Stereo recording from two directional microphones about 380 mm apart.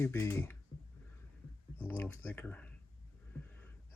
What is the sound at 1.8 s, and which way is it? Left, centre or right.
Speech, centre.